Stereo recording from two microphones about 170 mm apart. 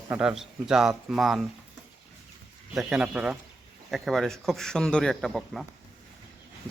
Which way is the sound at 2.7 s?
5° right (ahead or behind).